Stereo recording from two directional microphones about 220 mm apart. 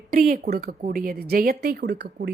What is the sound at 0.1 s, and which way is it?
A woman's voice, 40° right (ahead or behind).